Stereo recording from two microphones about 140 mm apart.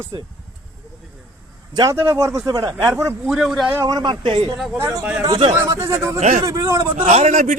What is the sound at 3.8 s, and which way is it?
Speech, 30° right (ahead or behind).